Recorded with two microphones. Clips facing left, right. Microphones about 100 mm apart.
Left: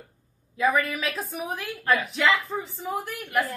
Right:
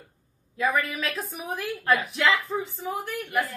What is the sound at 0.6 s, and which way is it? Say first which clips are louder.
A child's voice: left 2 dB; centre (ahead or behind).